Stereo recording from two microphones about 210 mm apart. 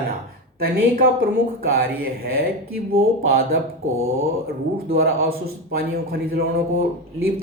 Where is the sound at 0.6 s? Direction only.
45° right (ahead or behind).